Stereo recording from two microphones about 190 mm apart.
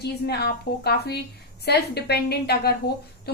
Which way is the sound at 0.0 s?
60° left (ahead or behind).